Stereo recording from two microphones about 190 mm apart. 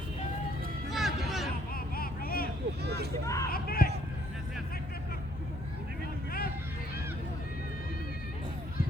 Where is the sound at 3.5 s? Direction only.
50° left (ahead or behind).